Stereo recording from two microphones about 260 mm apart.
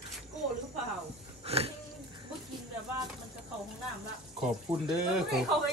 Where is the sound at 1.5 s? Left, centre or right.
Right.